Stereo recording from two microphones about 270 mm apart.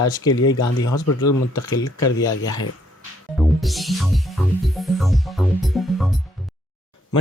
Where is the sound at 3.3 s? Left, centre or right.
Centre.